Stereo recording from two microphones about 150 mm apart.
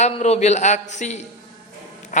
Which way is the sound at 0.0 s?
50° left (ahead or behind).